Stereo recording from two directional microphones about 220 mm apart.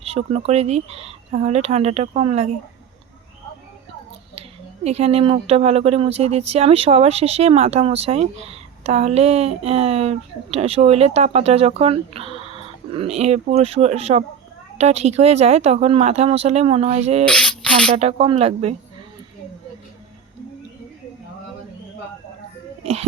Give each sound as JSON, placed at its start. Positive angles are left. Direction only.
{"t": 0.0, "sound": "speech", "side_deg": -25}
{"t": 4.4, "sound": "speech", "side_deg": -30}
{"t": 17.2, "sound": "rub", "side_deg": 5}
{"t": 17.9, "sound": "speech", "side_deg": -25}
{"t": 22.8, "sound": "a child's voice", "side_deg": -30}